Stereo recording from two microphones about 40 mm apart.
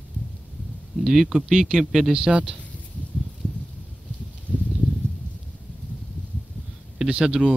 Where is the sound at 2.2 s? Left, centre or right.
Right.